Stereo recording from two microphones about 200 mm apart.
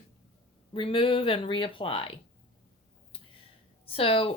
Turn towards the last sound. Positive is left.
turn(degrees=30)  # may be behind; listen again after turning